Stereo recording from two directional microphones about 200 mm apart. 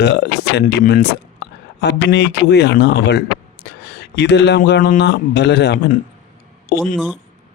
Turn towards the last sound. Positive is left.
turn(degrees=0)  # may be behind; listen again after turning